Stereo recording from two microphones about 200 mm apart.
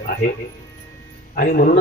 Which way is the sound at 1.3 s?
50° left (ahead or behind).